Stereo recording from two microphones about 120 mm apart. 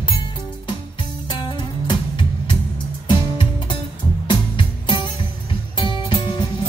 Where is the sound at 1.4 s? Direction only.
40° left (ahead or behind).